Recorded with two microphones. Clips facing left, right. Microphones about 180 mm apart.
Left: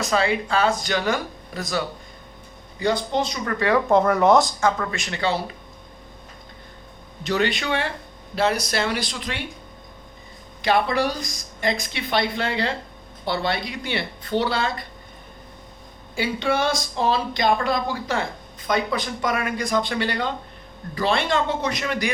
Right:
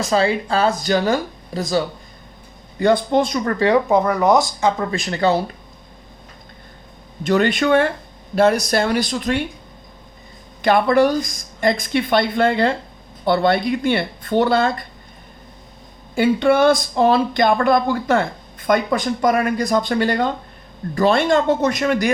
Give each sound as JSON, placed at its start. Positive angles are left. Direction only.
{"t": 0.0, "sound": "speech", "side_deg": -35}
{"t": 2.7, "sound": "speech", "side_deg": -55}
{"t": 3.8, "sound": "speech", "side_deg": 0}
{"t": 4.9, "sound": "speech", "side_deg": -35}
{"t": 7.3, "sound": "speech", "side_deg": -50}
{"t": 10.6, "sound": "speech", "side_deg": -50}
{"t": 16.1, "sound": "speech", "side_deg": -50}